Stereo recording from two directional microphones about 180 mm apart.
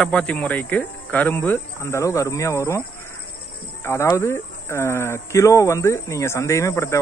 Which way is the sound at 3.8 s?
15° left (ahead or behind).